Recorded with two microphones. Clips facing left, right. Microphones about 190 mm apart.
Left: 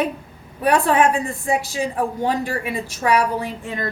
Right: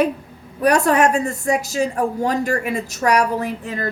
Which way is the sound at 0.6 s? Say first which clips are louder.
Right 1 dB; 40° right (ahead or behind).